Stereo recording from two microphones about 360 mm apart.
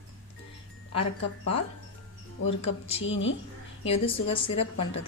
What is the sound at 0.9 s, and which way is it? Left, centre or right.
Speech, left.